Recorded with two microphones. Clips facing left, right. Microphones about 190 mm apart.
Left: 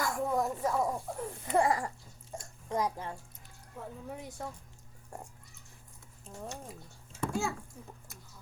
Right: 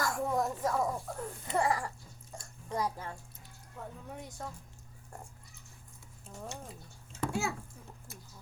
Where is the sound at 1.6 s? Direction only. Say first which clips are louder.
Left 2 dB; 20° left (ahead or behind).